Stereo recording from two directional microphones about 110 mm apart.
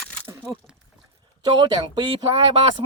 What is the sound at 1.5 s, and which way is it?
Speech, 45° right (ahead or behind).